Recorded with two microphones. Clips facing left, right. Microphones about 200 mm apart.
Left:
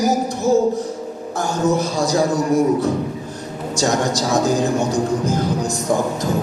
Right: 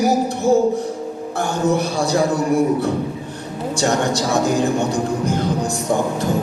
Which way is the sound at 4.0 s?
60° right (ahead or behind).